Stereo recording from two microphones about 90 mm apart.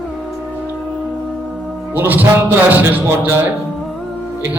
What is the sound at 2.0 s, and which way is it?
A man's voice, 20° right (ahead or behind).